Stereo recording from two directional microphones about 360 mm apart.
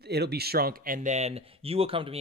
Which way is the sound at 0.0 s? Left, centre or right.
Right.